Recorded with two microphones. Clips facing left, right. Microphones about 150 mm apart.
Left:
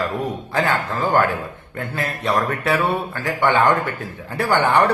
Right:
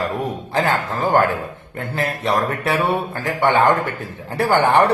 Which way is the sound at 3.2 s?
35° right (ahead or behind).